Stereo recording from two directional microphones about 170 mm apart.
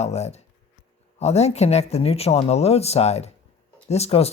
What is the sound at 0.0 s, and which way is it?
Speech, 40° left (ahead or behind).